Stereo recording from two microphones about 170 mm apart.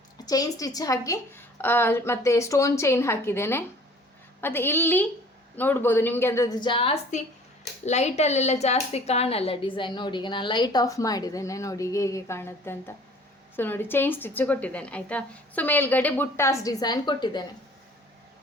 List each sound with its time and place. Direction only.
0.3 s a woman's voice: 20° left (ahead or behind)